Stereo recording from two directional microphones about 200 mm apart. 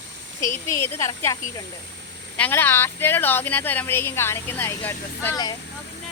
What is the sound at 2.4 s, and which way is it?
Speech, 10° left (ahead or behind).